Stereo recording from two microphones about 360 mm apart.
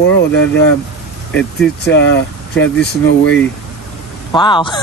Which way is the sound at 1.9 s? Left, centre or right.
Left.